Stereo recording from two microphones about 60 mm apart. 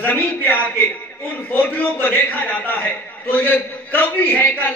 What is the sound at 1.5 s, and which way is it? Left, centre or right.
A man's voice, left.